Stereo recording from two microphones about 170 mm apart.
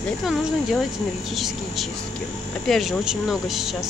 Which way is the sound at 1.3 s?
Centre (ahead or behind).